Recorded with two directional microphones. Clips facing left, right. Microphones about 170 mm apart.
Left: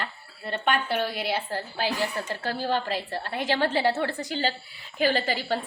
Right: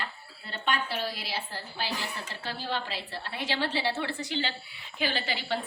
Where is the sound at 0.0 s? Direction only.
55° left (ahead or behind).